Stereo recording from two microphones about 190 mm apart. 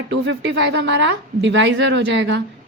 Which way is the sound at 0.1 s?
65° right (ahead or behind).